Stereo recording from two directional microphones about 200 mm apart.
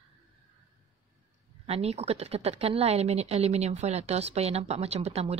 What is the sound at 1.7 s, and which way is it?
A woman's voice, 30° right (ahead or behind).